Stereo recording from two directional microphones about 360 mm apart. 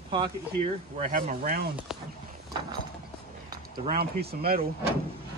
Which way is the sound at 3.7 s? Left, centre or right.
Centre.